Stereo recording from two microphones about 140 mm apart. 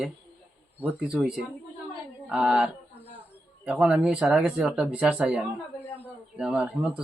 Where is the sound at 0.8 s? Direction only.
10° right (ahead or behind).